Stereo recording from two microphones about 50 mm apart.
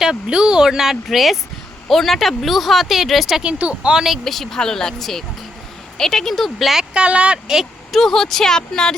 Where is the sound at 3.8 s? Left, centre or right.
Centre.